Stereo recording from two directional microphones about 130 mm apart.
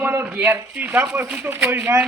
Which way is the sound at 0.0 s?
10° right (ahead or behind).